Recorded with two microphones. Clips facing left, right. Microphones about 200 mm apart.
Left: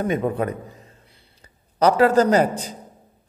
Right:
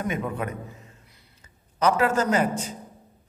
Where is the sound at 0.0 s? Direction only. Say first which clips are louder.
Left 6 dB; 35° left (ahead or behind).